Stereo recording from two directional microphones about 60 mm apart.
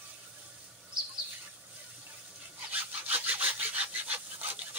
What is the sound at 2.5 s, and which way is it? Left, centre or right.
Sawing, right.